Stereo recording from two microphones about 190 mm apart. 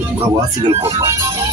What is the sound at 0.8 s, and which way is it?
Speech, 15° right (ahead or behind).